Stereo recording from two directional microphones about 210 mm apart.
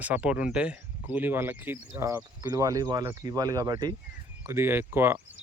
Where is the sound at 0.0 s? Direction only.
5° right (ahead or behind).